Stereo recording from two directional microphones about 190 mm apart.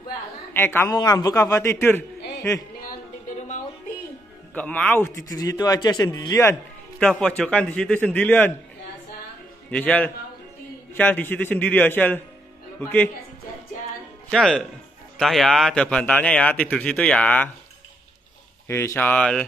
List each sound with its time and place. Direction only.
0.5 s a woman's voice: 10° left (ahead or behind)
3.3 s music: 40° left (ahead or behind)
4.6 s speech: 10° left (ahead or behind)
7.0 s speech: 5° left (ahead or behind)
9.7 s speech: 5° left (ahead or behind)
14.3 s a man's voice: centre (ahead or behind)
18.7 s speech: 15° left (ahead or behind)